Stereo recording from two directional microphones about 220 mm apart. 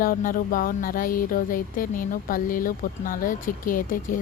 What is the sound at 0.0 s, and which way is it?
A woman's voice, 40° left (ahead or behind).